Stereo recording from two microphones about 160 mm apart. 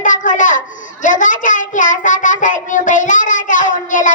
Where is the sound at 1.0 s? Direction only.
50° left (ahead or behind).